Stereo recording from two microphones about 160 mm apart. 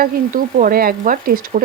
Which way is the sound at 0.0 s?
60° right (ahead or behind).